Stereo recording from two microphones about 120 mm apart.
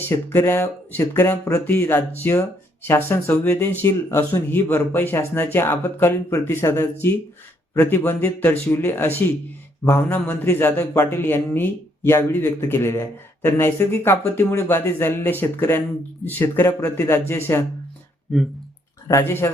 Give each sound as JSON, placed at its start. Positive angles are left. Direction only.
{"t": 0.0, "sound": "speech", "side_deg": 20}
{"t": 19.2, "sound": "speech", "side_deg": 20}